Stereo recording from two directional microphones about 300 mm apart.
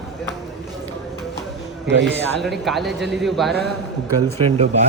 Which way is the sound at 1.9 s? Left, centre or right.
Right.